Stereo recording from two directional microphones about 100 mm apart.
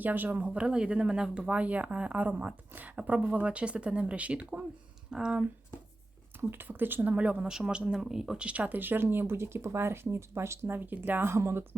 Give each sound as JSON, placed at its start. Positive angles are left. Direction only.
{"t": 0.0, "sound": "speech", "side_deg": -20}
{"t": 6.5, "sound": "speech", "side_deg": -20}